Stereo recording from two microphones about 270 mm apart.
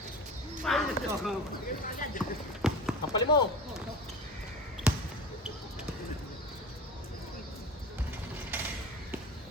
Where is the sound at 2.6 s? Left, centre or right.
Centre.